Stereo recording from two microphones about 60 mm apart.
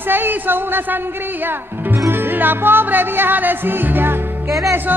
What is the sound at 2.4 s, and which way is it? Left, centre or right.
Music, right.